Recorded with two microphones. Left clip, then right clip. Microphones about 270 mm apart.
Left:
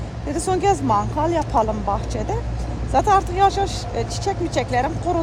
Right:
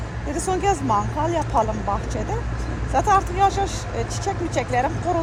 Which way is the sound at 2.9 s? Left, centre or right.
Centre.